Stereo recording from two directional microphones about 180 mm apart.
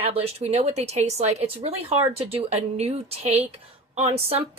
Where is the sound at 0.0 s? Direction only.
35° right (ahead or behind).